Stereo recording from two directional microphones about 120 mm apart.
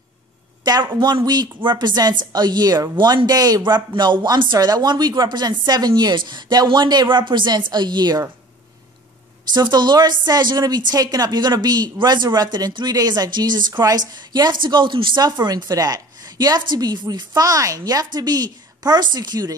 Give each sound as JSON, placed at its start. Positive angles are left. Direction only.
{"t": 0.9, "sound": "speech", "side_deg": -35}
{"t": 9.5, "sound": "speech", "side_deg": -35}